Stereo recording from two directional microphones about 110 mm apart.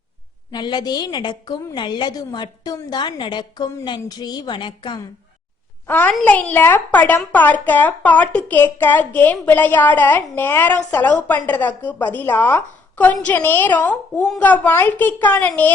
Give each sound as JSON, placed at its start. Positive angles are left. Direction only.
{"t": 0.5, "sound": "a woman's voice", "side_deg": 40}
{"t": 5.9, "sound": "a child's voice", "side_deg": 15}